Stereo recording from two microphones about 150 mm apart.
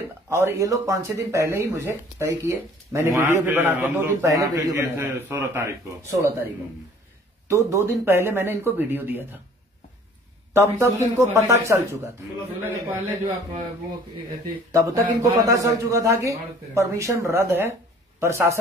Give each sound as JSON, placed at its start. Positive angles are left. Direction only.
{"t": 0.3, "sound": "a man's voice", "side_deg": -20}
{"t": 10.5, "sound": "a man's voice", "side_deg": -20}
{"t": 14.7, "sound": "a man's voice", "side_deg": -20}